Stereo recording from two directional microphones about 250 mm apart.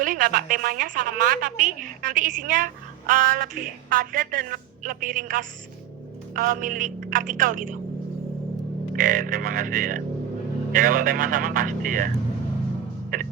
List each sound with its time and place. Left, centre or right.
0.0 s a woman's voice: right
9.0 s a woman's voice: right